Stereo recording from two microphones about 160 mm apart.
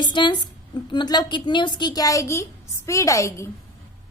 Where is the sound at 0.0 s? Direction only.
30° left (ahead or behind).